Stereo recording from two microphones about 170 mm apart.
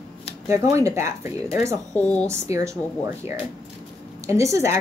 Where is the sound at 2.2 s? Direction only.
20° right (ahead or behind).